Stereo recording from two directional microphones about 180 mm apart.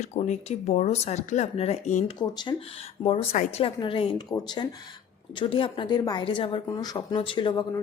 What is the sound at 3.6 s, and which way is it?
A woman's voice, 30° left (ahead or behind).